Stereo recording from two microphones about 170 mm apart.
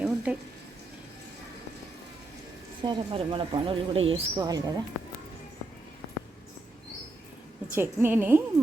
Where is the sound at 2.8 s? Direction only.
30° right (ahead or behind).